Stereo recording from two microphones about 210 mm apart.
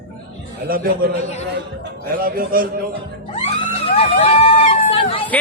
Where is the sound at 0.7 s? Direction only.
45° right (ahead or behind).